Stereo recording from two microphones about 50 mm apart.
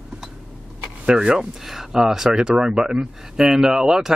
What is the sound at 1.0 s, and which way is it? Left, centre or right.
Speech, centre.